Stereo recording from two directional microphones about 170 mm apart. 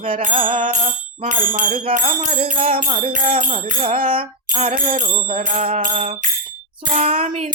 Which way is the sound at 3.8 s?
30° right (ahead or behind).